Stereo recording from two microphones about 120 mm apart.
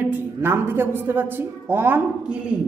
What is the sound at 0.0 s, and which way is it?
Speech, 15° right (ahead or behind).